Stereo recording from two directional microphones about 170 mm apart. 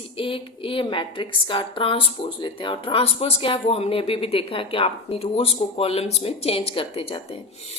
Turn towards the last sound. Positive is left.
turn(degrees=30)  # may be behind; listen again after turning